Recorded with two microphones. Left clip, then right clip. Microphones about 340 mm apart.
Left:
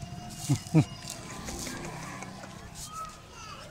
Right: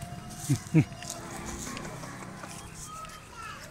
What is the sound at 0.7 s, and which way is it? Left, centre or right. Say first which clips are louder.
Livestock: even; centre.